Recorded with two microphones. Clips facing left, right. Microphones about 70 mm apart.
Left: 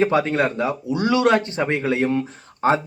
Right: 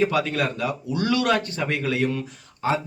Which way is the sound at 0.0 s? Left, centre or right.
Left.